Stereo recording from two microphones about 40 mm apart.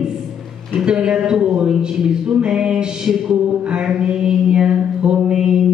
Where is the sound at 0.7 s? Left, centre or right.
Right.